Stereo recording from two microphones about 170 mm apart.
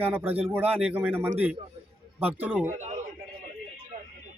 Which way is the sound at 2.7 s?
45° right (ahead or behind).